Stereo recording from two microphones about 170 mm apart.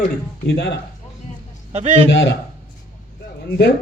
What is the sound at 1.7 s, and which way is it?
Speech, 40° right (ahead or behind).